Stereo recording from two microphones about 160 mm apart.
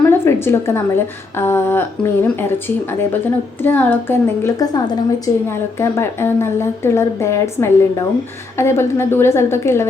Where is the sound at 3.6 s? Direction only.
10° left (ahead or behind).